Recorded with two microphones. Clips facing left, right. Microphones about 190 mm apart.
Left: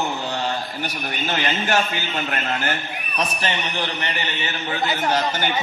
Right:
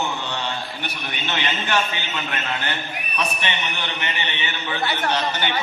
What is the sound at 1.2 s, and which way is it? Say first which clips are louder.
A man's voice: left 3 dB; 40° left (ahead or behind).